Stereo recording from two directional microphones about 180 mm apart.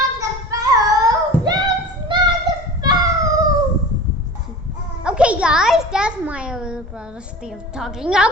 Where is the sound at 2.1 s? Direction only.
25° right (ahead or behind).